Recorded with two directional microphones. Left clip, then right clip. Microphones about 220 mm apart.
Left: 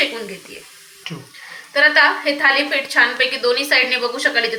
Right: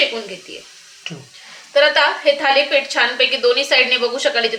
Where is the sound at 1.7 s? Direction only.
50° right (ahead or behind).